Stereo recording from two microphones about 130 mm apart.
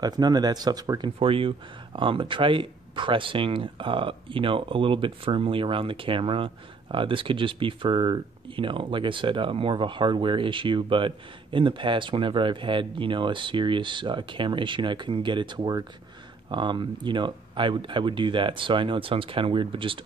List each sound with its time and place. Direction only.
0.0 s speech: 30° right (ahead or behind)